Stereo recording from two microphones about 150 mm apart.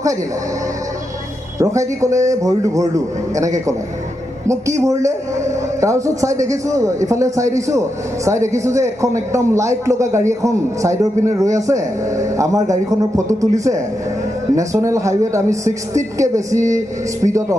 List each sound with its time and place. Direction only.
1.5 s a man's voice: 20° right (ahead or behind)